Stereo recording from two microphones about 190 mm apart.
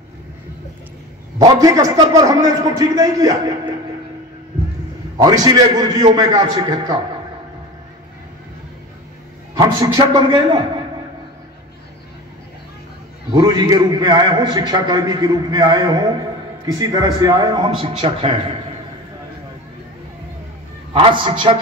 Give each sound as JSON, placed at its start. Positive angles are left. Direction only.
{"t": 1.4, "sound": "a man's voice", "side_deg": -20}
{"t": 5.1, "sound": "a man's voice", "side_deg": -20}
{"t": 9.6, "sound": "a man's voice", "side_deg": -20}
{"t": 13.3, "sound": "a man's voice", "side_deg": -20}
{"t": 20.9, "sound": "a man's voice", "side_deg": -25}